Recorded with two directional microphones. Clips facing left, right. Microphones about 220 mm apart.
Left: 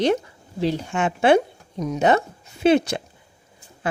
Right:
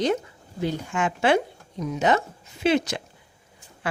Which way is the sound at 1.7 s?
40° left (ahead or behind).